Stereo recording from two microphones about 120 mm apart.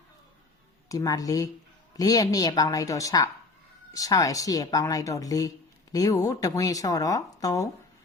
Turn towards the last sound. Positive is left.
turn(degrees=30)  # may be behind; listen again after turning